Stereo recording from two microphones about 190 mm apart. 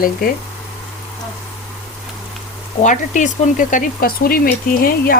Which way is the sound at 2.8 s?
40° left (ahead or behind).